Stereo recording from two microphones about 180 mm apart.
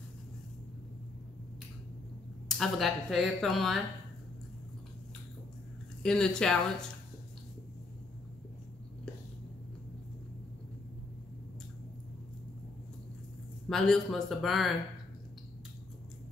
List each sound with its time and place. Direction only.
2.4 s speech: centre (ahead or behind)
6.0 s speech: 5° left (ahead or behind)
13.7 s speech: 5° left (ahead or behind)